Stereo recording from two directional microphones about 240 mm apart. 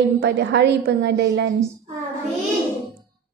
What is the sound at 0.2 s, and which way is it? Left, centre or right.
A woman's voice, right.